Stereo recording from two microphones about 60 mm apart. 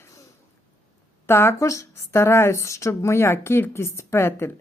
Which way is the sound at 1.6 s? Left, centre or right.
Left.